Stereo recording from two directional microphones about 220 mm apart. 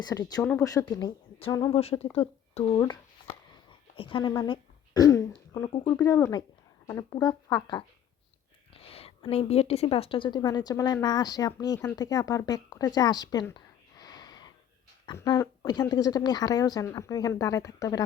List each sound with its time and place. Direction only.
0.0 s a woman's voice: 15° left (ahead or behind)
14.0 s snort: 20° left (ahead or behind)
15.0 s a woman's voice: 20° left (ahead or behind)